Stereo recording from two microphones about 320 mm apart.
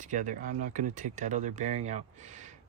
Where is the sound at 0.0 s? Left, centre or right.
Right.